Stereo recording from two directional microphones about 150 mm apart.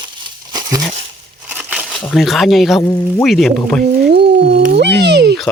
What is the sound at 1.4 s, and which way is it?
Crumpling, 10° right (ahead or behind).